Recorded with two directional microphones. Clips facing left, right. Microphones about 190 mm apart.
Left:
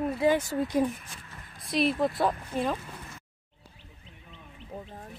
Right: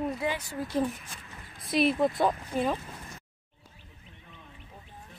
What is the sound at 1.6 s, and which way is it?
Speech, centre (ahead or behind).